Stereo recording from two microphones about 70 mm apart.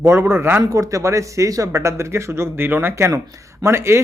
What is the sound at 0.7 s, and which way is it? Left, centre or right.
Speech, right.